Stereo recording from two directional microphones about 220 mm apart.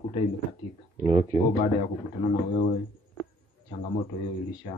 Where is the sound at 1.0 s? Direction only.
25° right (ahead or behind).